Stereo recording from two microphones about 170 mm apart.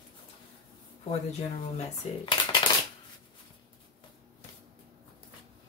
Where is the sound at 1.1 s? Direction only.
35° left (ahead or behind).